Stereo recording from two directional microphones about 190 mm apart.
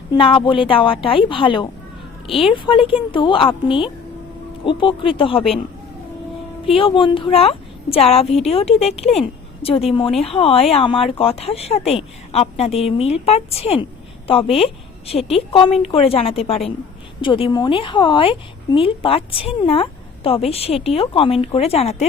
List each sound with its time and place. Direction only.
0.1 s a woman's voice: 25° left (ahead or behind)
6.7 s a woman's voice: 30° left (ahead or behind)